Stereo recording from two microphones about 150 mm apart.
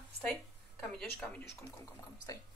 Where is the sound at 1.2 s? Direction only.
15° left (ahead or behind).